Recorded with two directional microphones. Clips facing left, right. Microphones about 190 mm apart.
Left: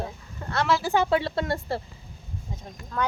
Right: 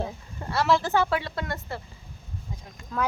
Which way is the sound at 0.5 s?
5° right (ahead or behind).